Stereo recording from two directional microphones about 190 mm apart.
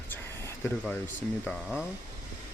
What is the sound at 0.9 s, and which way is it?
Speech, 10° left (ahead or behind).